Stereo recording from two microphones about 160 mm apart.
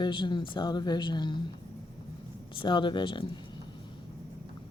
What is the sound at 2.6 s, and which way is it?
Speech, 30° left (ahead or behind).